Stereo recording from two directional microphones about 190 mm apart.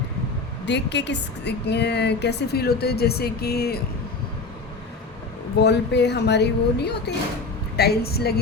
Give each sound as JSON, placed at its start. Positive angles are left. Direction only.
{"t": 0.6, "sound": "a woman's voice", "side_deg": 65}
{"t": 5.6, "sound": "a woman's voice", "side_deg": 60}